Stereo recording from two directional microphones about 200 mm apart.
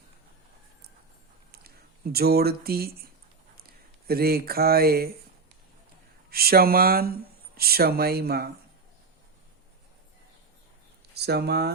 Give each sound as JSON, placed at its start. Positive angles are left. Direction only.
{"t": 2.1, "sound": "speech", "side_deg": -50}
{"t": 6.3, "sound": "speech", "side_deg": -50}
{"t": 11.1, "sound": "speech", "side_deg": -55}